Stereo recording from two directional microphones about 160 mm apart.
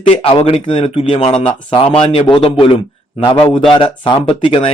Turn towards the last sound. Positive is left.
turn(degrees=35)  # may be behind; listen again after turning